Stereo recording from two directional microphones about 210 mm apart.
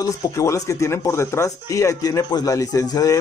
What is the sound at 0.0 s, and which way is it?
Speech, 15° left (ahead or behind).